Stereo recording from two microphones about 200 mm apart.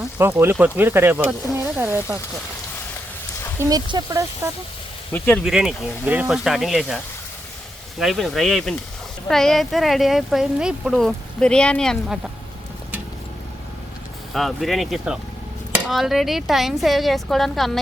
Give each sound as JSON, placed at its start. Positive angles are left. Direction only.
{"t": 0.0, "sound": "speech", "side_deg": -10}
{"t": 3.6, "sound": "speech", "side_deg": -20}
{"t": 5.1, "sound": "speech", "side_deg": 10}
{"t": 5.5, "sound": "speech", "side_deg": 0}
{"t": 14.3, "sound": "speech", "side_deg": 0}